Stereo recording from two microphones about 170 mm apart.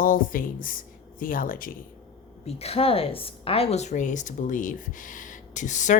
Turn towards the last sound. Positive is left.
turn(degrees=45)  # may be behind; listen again after turning